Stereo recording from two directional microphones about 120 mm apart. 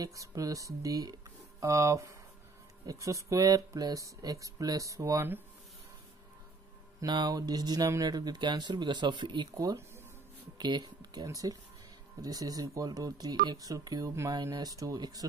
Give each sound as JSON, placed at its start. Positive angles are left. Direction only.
{"t": 0.0, "sound": "speech", "side_deg": -30}
{"t": 7.0, "sound": "speech", "side_deg": -35}
{"t": 10.6, "sound": "speech", "side_deg": -35}